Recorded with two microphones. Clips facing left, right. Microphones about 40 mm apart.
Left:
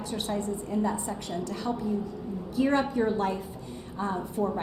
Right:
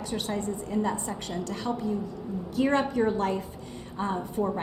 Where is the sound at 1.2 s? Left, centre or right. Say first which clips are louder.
Even; right.